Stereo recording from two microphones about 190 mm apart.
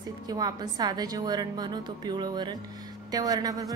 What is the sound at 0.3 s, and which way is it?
A woman's voice, 20° right (ahead or behind).